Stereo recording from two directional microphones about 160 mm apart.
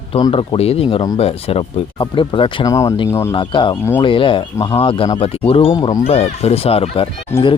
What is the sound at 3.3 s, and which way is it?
Speech, 30° left (ahead or behind).